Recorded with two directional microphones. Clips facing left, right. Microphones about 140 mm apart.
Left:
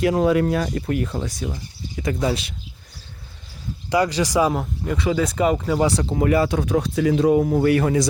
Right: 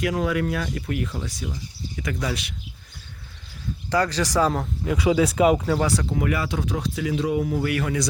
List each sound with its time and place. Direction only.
0.0 s speech: 30° left (ahead or behind)
1.1 s speech: 55° left (ahead or behind)
2.0 s speech: 25° left (ahead or behind)
3.8 s speech: 15° left (ahead or behind)
4.9 s speech: 10° right (ahead or behind)
5.8 s speech: 25° left (ahead or behind)
6.6 s speech: 55° left (ahead or behind); by 8.0 s 35° left (ahead or behind)